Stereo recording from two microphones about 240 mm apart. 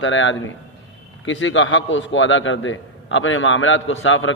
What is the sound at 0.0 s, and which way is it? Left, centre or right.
A man's voice, left.